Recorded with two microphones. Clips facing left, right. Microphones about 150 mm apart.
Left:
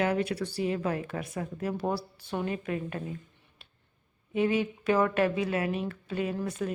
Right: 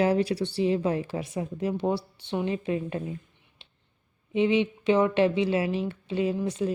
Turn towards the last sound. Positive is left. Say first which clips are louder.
# right 5 dB
turn(degrees=-25)  # may be behind; listen again after turning